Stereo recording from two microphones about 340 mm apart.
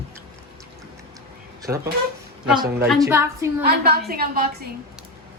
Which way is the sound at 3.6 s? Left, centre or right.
Right.